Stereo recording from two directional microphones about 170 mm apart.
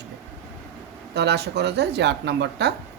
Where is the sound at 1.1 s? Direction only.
80° right.